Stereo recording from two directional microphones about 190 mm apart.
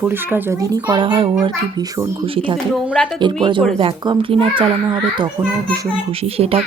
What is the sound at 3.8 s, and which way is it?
Speech, 30° right (ahead or behind).